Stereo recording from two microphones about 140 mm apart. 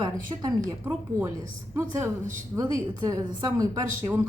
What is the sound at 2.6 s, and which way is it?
A woman's voice, 25° right (ahead or behind).